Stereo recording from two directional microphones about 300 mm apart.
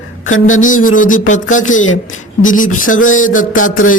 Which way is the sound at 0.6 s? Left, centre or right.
Left.